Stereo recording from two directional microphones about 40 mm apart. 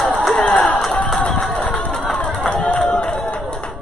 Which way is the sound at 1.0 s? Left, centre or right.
Centre.